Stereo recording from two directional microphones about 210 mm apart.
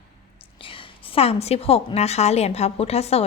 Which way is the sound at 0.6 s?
25° left (ahead or behind).